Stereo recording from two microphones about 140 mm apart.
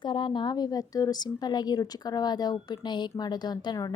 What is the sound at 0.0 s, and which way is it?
A woman's voice, 35° left (ahead or behind).